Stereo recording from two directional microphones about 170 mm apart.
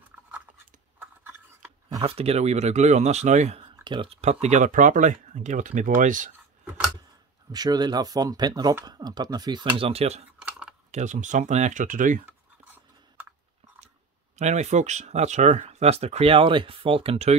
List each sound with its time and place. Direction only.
0.9 s a sound: 15° right (ahead or behind)
2.0 s speech: 35° right (ahead or behind)
7.5 s speech: 25° right (ahead or behind); by 12.2 s 50° right (ahead or behind)
14.4 s speech: 45° right (ahead or behind)